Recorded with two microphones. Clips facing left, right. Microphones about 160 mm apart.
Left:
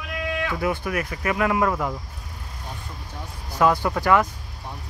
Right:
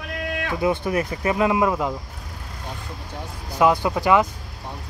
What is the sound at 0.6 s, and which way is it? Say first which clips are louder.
Speech: right 7 dB; 25° right (ahead or behind).